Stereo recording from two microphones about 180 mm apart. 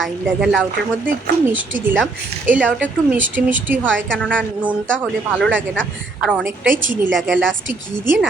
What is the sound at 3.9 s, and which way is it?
Speech, 90° right.